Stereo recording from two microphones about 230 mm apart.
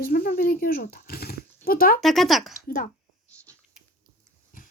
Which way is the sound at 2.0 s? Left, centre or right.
Centre.